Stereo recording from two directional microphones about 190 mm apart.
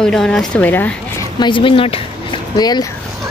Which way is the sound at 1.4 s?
25° left (ahead or behind).